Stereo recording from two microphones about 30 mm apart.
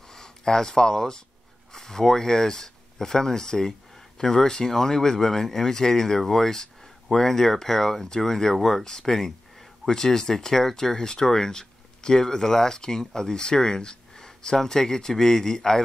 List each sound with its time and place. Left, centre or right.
0.1 s speech: centre
8.8 s speech: left